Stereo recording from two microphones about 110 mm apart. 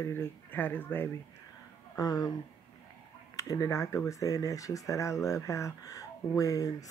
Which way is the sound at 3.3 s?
30° left (ahead or behind).